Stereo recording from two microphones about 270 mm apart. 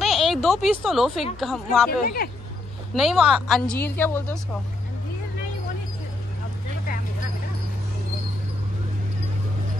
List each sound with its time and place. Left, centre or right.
0.0 s a woman's voice: centre
1.9 s speech: left
2.9 s a woman's voice: centre